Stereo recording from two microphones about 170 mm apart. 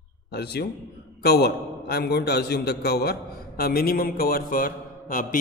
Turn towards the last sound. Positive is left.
turn(degrees=55)  # may be behind; listen again after turning